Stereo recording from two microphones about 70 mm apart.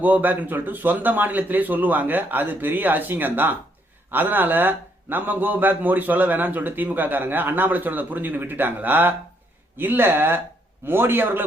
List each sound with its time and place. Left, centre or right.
0.0 s a man's voice: right